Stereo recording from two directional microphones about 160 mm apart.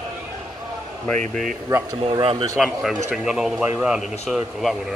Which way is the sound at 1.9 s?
30° right (ahead or behind).